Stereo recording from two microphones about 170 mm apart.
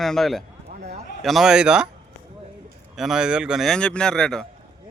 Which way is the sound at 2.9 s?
5° right (ahead or behind).